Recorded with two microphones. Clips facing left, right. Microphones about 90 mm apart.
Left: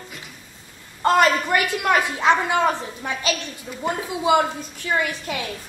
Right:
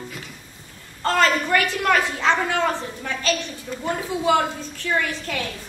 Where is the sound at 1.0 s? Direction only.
15° left (ahead or behind).